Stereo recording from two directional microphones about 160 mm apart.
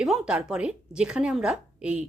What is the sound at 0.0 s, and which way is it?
A woman's voice, 5° right (ahead or behind).